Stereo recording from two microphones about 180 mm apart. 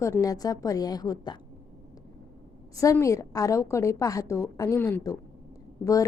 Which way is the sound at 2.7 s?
15° left (ahead or behind).